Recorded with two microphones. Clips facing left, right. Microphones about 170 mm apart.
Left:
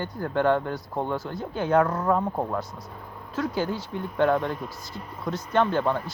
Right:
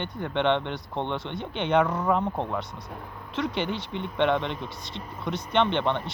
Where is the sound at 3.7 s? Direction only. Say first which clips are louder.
Left 1 dB; 75° right (ahead or behind).